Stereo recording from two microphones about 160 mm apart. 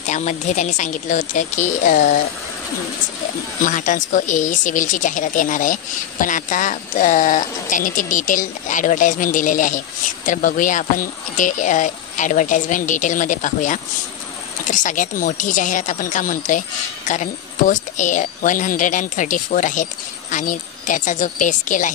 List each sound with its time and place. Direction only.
0.0 s speech: 50° left (ahead or behind)
3.6 s speech: 55° left (ahead or behind)